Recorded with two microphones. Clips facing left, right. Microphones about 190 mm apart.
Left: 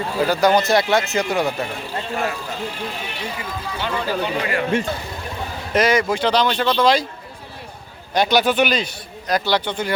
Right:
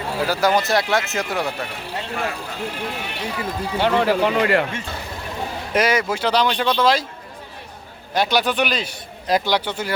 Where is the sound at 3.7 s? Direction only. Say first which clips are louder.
Right 6 dB; 70° right (ahead or behind).